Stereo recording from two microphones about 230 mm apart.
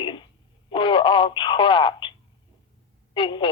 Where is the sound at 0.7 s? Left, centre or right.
Left.